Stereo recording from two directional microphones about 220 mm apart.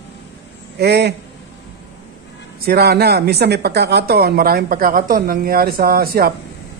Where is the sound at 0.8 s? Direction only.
45° right (ahead or behind).